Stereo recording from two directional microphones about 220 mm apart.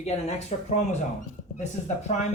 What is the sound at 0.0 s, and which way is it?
Speech, 30° left (ahead or behind).